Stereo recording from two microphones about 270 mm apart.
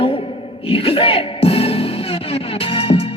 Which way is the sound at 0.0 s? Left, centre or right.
Left.